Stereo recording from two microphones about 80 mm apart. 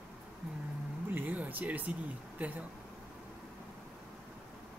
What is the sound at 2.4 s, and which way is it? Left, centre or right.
Speech, right.